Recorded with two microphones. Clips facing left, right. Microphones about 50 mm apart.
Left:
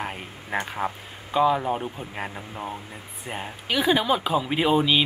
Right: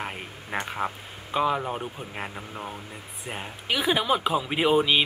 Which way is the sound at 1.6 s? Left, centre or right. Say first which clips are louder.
Left 4 dB; centre.